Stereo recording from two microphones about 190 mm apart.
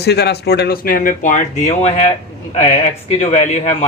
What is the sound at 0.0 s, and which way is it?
Speech, 60° left (ahead or behind).